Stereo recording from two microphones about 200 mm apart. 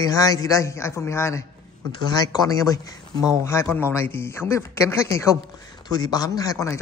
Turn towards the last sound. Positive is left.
turn(degrees=15)  # may be behind; listen again after turning